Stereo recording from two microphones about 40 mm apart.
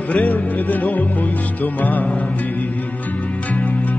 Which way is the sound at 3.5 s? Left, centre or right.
Left.